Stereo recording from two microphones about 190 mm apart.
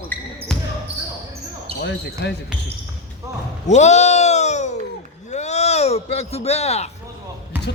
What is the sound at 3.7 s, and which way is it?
Bleat, 35° left (ahead or behind).